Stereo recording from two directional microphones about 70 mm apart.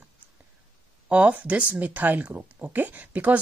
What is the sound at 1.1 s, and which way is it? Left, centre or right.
Speech, centre.